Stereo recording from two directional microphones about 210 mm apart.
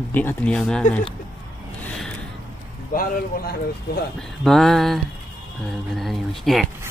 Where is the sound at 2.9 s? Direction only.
45° left (ahead or behind).